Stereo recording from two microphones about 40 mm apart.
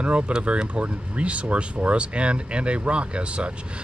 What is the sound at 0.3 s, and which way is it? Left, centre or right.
Speech, right.